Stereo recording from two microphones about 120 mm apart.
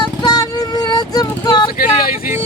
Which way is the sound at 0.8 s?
35° left (ahead or behind).